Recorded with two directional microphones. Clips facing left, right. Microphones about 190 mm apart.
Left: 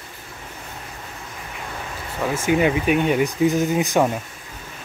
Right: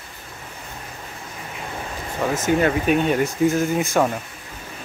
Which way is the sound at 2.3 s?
10° left (ahead or behind).